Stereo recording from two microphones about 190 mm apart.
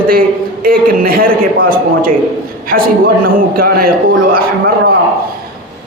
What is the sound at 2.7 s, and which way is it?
A woman's voice, 50° right (ahead or behind).